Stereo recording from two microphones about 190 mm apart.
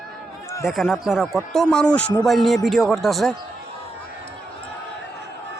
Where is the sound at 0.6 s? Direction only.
Centre (ahead or behind).